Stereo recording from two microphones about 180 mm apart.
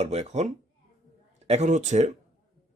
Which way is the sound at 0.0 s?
35° right (ahead or behind).